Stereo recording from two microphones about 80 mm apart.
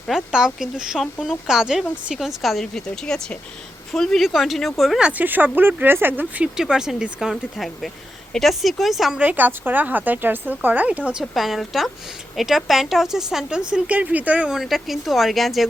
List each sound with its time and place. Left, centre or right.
0.1 s speech: centre
5.0 s speech: right
6.6 s speech: centre
9.1 s speech: centre
11.2 s speech: centre
14.5 s speech: centre